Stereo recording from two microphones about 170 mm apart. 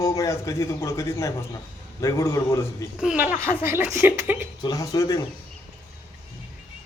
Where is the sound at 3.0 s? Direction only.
5° right (ahead or behind).